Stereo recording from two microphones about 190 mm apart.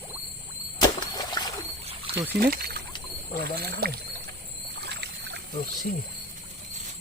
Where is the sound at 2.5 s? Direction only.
55° right (ahead or behind).